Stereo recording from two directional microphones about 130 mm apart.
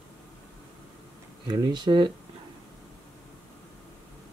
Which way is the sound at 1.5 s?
35° right (ahead or behind).